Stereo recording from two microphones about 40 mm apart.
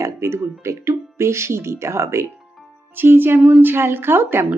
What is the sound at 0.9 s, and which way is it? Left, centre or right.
Speech, right.